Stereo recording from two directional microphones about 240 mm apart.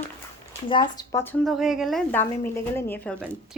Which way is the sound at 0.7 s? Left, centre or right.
Centre.